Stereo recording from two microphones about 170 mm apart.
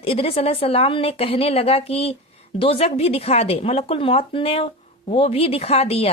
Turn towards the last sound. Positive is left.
turn(degrees=35)  # may be behind; listen again after turning